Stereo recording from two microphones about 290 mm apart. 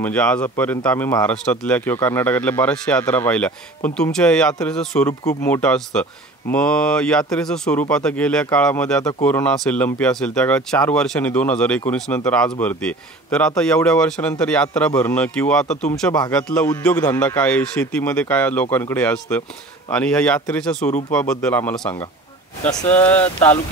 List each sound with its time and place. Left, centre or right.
0.0 s speech: centre
15.6 s speech: left
16.0 s speech: centre